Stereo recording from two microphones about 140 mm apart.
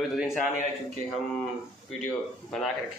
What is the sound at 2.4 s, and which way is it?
Speech, 5° left (ahead or behind).